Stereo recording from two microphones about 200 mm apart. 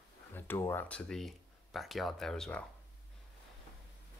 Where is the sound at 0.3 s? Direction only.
10° left (ahead or behind).